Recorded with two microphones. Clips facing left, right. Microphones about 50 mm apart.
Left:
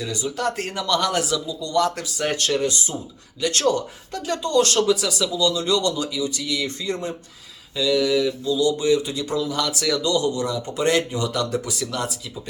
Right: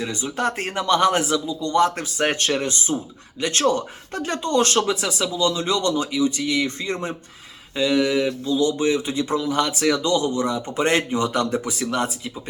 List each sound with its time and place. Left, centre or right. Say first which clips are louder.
0.0 s speech: right 1 dB; right